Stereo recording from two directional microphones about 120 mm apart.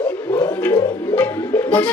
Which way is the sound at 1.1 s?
15° left (ahead or behind).